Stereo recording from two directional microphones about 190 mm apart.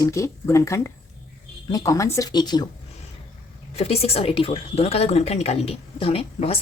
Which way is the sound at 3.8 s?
30° left (ahead or behind).